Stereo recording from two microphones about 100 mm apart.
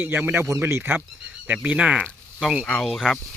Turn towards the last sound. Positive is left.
turn(degrees=0)  # may be behind; listen again after turning